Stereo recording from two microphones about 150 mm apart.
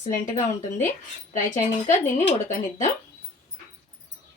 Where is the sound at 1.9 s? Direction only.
50° left (ahead or behind).